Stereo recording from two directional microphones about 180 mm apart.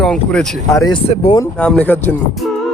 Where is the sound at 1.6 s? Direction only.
10° left (ahead or behind).